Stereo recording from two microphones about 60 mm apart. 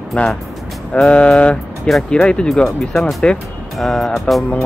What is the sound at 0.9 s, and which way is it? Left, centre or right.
Music, left.